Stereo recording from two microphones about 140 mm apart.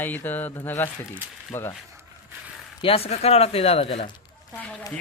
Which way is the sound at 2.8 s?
40° left (ahead or behind).